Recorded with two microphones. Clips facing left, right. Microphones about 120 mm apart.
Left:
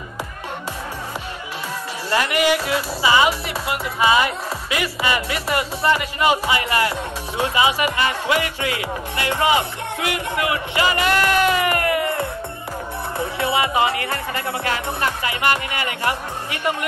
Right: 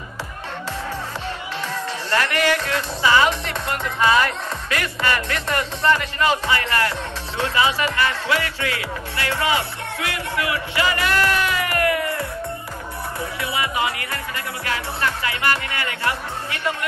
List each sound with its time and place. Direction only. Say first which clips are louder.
2.0 s speech: left 2 dB; 10° left (ahead or behind)
13.4 s speech: left 5 dB; 25° left (ahead or behind)